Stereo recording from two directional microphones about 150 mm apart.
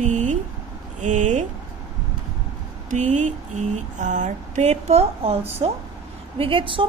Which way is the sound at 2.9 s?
55° right (ahead or behind).